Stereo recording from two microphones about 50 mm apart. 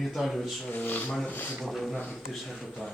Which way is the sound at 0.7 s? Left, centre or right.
Left.